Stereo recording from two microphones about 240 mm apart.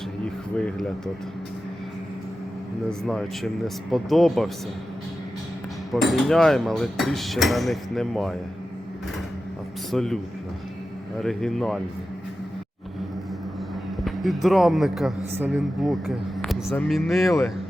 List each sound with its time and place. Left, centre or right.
0.5 s cutlery: centre
3.1 s cutlery: centre
5.9 s cutlery: centre
9.9 s cutlery: centre
11.2 s cutlery: centre
14.0 s music: centre
14.4 s cutlery: centre
15.4 s speech: centre
16.7 s cutlery: centre